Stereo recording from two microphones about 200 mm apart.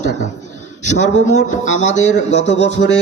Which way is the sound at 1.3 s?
35° left (ahead or behind).